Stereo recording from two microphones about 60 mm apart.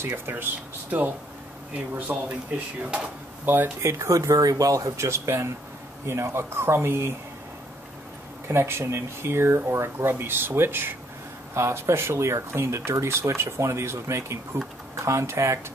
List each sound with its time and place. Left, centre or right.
0.0 s speech: right
2.0 s speech: right
3.5 s speech: right
3.8 s speech: right
8.5 s speech: right
11.5 s speech: right